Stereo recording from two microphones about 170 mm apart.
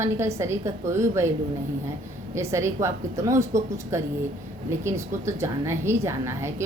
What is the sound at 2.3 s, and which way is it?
A woman's voice, 15° right (ahead or behind).